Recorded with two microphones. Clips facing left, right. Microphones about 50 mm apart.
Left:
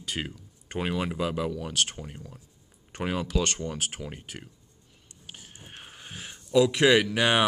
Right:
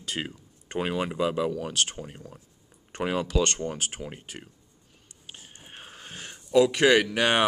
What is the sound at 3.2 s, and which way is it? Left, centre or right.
Speech, centre.